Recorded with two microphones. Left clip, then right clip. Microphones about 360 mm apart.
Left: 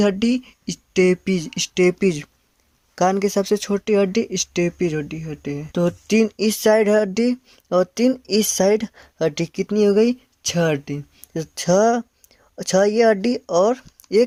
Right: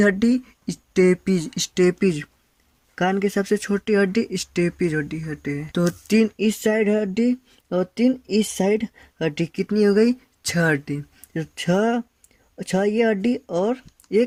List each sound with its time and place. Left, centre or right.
0.0 s speech: centre